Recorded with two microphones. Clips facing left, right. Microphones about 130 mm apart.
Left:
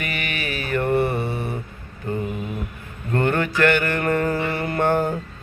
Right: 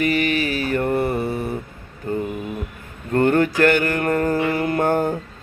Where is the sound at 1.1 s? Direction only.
Centre (ahead or behind).